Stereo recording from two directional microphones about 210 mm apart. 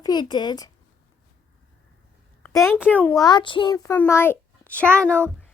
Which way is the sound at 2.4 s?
15° left (ahead or behind).